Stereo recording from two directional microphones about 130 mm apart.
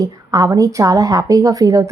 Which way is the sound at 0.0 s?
25° right (ahead or behind).